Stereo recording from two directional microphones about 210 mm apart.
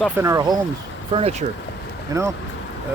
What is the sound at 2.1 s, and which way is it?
Speech, 15° right (ahead or behind).